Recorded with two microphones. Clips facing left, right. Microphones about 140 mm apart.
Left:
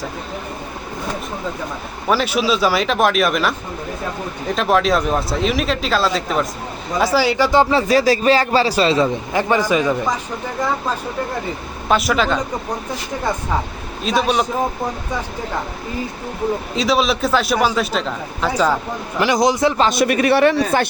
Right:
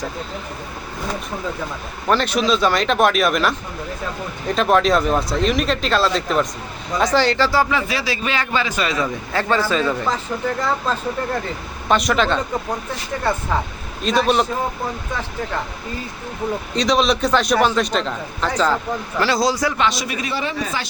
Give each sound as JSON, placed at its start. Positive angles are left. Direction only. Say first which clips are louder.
{"t": 2.0, "sound": "a man's voice", "louder": "even", "side_deg": 5}
{"t": 7.6, "sound": "a man's voice", "louder": "left 6 dB", "side_deg": 35}
{"t": 9.3, "sound": "speech", "louder": "even", "side_deg": 15}
{"t": 11.9, "sound": "a man's voice", "louder": "left 1 dB", "side_deg": 5}
{"t": 14.0, "sound": "a man's voice", "louder": "right 1 dB", "side_deg": 0}
{"t": 16.7, "sound": "a man's voice", "louder": "right 1 dB", "side_deg": 5}
{"t": 19.9, "sound": "speech", "louder": "left 10 dB", "side_deg": 60}